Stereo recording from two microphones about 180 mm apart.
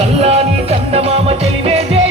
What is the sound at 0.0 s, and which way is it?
Music, 35° right (ahead or behind).